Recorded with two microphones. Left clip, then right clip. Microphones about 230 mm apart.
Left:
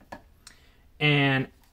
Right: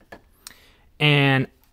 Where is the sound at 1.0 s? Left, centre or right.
Right.